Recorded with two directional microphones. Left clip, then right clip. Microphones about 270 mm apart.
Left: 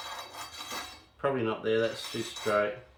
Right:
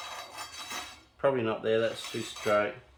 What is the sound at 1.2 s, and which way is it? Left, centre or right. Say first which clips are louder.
Speech: right 2 dB; centre.